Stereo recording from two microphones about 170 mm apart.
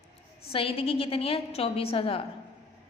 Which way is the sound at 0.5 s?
35° left (ahead or behind).